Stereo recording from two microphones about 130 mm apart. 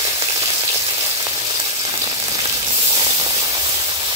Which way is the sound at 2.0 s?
30° right (ahead or behind).